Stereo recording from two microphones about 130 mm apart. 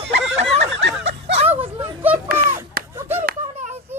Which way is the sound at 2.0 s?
15° right (ahead or behind).